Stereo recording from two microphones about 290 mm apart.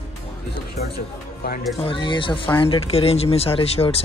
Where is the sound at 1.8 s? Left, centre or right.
Centre.